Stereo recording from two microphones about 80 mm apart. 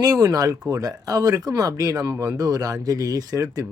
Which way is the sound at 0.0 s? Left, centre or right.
Right.